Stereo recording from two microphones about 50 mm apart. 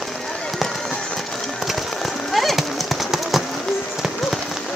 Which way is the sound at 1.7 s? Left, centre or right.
Centre.